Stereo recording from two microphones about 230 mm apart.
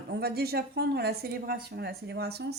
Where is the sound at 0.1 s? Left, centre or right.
Right.